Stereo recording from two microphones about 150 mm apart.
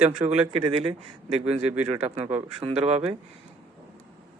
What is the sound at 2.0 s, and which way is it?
Speech, 40° right (ahead or behind).